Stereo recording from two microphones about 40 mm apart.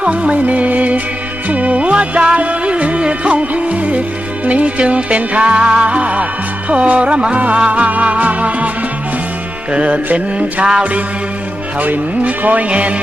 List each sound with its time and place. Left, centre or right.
0.0 s music: right
9.7 s music: right
11.8 s music: right